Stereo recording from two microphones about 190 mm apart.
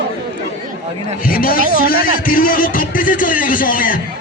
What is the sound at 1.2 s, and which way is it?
A man's voice, 50° left (ahead or behind).